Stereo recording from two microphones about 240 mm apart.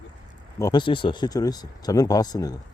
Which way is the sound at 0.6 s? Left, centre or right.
Centre.